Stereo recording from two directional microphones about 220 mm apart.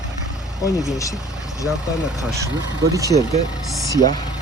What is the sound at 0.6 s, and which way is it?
Speech, 15° left (ahead or behind).